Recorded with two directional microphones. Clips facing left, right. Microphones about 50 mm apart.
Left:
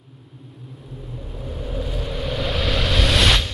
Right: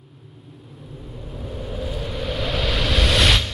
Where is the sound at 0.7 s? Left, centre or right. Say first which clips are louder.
Left 1 dB; centre.